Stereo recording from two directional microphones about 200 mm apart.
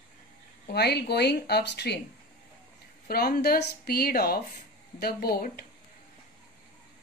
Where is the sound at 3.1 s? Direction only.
50° left (ahead or behind).